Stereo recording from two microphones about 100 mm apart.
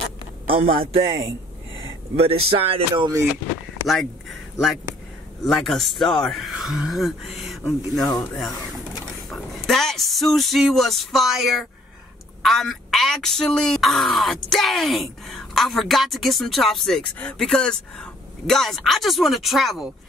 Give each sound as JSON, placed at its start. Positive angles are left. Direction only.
{"t": 0.5, "sound": "speech", "side_deg": -70}
{"t": 2.1, "sound": "speech", "side_deg": -75}
{"t": 3.8, "sound": "a sound", "side_deg": 0}
{"t": 5.4, "sound": "speech", "side_deg": 0}
{"t": 8.0, "sound": "speech", "side_deg": 40}
{"t": 8.4, "sound": "speech", "side_deg": 5}